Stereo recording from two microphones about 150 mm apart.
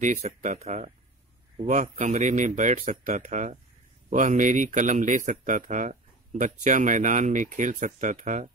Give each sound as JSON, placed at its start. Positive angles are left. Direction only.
{"t": 0.0, "sound": "speech", "side_deg": -50}